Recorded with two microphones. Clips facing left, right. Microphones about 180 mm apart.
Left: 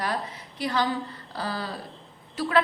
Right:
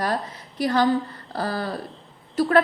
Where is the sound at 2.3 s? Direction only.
45° right (ahead or behind).